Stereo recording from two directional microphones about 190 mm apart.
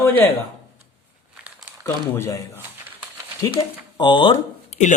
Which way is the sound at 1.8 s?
15° left (ahead or behind).